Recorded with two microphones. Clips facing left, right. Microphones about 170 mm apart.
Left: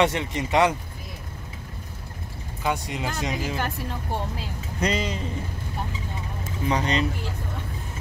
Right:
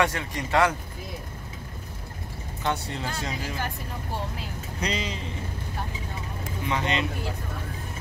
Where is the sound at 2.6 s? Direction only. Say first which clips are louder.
Left 2 dB; 15° left (ahead or behind).